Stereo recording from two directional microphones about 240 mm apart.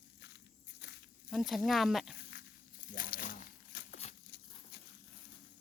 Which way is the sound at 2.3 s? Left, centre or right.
Left.